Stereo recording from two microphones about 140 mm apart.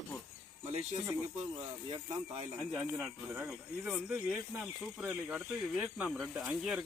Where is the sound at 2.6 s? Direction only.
Centre (ahead or behind).